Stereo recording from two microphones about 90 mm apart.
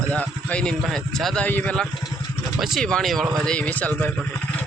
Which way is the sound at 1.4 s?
20° left (ahead or behind).